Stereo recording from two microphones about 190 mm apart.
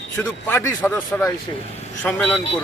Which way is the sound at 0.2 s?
15° left (ahead or behind).